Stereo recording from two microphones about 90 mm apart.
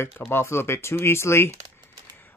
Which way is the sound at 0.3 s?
25° left (ahead or behind).